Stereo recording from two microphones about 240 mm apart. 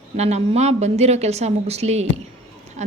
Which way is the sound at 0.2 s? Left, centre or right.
Right.